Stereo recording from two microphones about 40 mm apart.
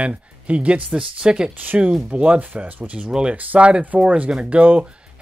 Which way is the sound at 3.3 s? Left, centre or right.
Right.